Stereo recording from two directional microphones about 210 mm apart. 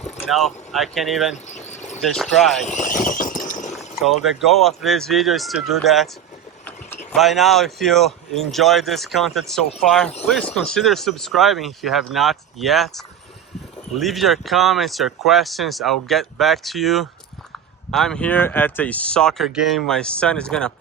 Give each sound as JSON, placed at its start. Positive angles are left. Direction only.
{"t": 0.3, "sound": "speech", "side_deg": 0}
{"t": 1.5, "sound": "cricket", "side_deg": 35}
{"t": 2.0, "sound": "speech", "side_deg": 0}
{"t": 2.6, "sound": "a sound", "side_deg": 35}
{"t": 4.1, "sound": "speech", "side_deg": 0}
{"t": 7.1, "sound": "speech", "side_deg": 0}